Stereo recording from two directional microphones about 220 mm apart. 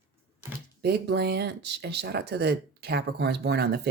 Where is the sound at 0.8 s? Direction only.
50° right (ahead or behind).